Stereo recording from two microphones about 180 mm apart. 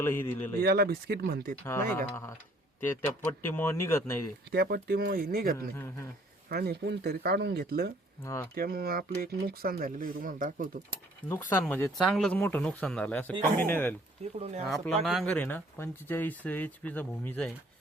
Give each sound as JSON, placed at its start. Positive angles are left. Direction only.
{"t": 0.0, "sound": "speech", "side_deg": 10}
{"t": 0.6, "sound": "speech", "side_deg": -60}
{"t": 1.6, "sound": "speech", "side_deg": 15}
{"t": 4.5, "sound": "speech", "side_deg": -60}
{"t": 8.2, "sound": "speech", "side_deg": 15}
{"t": 8.5, "sound": "speech", "side_deg": -55}
{"t": 11.3, "sound": "speech", "side_deg": 10}
{"t": 14.2, "sound": "speech", "side_deg": -35}
{"t": 14.7, "sound": "speech", "side_deg": 0}
{"t": 15.3, "sound": "speech", "side_deg": 10}